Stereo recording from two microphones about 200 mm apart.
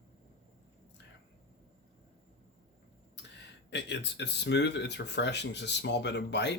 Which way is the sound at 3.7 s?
60° left (ahead or behind).